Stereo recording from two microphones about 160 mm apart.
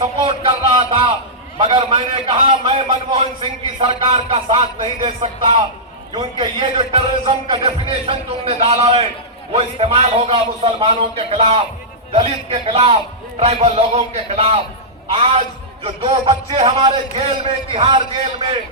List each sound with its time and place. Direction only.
0.0 s a sound: 35° right (ahead or behind)
1.5 s a man's voice: 35° right (ahead or behind)
15.8 s a man's voice: 40° right (ahead or behind)